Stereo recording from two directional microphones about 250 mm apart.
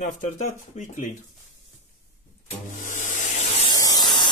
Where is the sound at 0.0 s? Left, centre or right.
Left.